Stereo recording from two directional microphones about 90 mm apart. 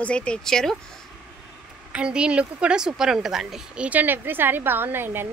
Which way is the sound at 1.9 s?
10° right (ahead or behind).